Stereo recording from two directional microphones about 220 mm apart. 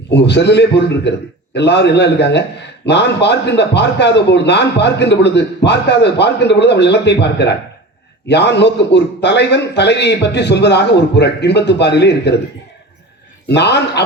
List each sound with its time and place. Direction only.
0.1 s a man's voice: 50° left (ahead or behind)
13.5 s a man's voice: 50° left (ahead or behind)